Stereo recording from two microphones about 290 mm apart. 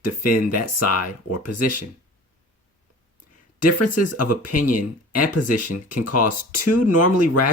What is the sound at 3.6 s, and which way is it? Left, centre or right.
Speech, left.